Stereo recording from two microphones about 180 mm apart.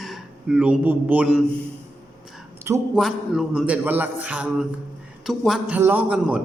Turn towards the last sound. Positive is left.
turn(degrees=-5)  # may be behind; listen again after turning